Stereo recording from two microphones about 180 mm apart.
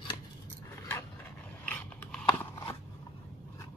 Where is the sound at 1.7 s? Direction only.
5° left (ahead or behind).